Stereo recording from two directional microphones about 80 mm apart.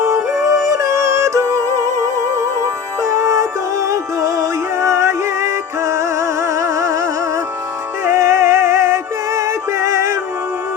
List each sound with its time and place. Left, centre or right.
0.0 s music: right
3.0 s music: right